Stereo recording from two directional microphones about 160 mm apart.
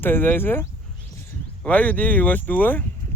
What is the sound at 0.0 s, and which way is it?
Speech, 15° left (ahead or behind).